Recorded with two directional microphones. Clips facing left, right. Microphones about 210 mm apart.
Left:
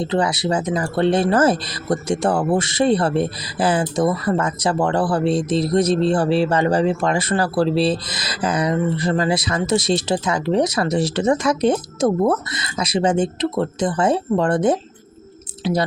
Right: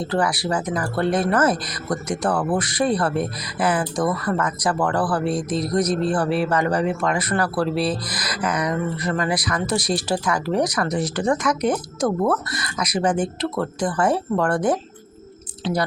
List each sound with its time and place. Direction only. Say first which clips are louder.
0.0 s speech: left 2 dB; 20° left (ahead or behind)